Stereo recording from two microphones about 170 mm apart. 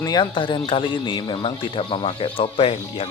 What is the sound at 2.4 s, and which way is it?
Speech, 30° left (ahead or behind).